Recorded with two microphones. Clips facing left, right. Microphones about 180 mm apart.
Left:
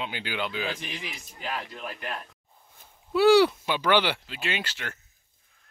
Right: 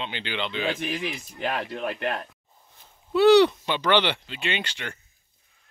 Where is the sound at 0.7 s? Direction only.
65° right (ahead or behind).